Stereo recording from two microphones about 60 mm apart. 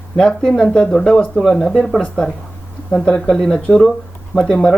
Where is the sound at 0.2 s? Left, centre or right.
Centre.